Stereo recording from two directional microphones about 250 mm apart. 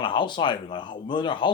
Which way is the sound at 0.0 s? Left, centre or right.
Centre.